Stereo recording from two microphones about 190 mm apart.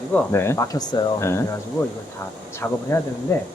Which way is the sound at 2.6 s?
10° left (ahead or behind).